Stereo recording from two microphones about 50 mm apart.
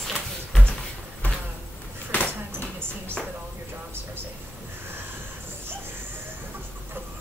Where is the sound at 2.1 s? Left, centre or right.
Left.